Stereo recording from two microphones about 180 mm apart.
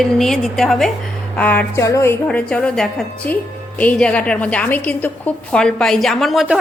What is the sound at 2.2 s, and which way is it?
A woman's voice, 5° left (ahead or behind).